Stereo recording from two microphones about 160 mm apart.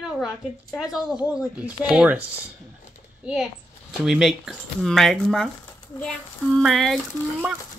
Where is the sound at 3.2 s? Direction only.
5° right (ahead or behind).